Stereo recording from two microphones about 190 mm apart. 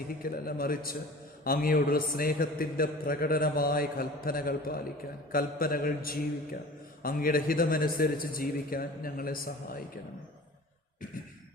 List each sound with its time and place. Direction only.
0.2 s a man's voice: 50° left (ahead or behind)